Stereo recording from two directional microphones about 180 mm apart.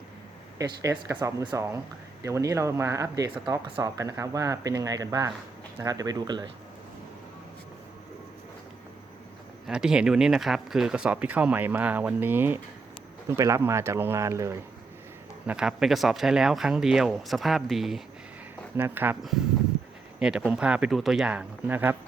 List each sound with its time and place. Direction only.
0.6 s speech: 20° right (ahead or behind)
9.6 s speech: 5° right (ahead or behind)
15.4 s speech: 5° right (ahead or behind)
20.1 s speech: 5° right (ahead or behind)